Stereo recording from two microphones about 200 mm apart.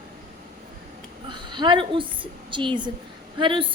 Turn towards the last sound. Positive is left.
turn(degrees=-25)  # may be behind; listen again after turning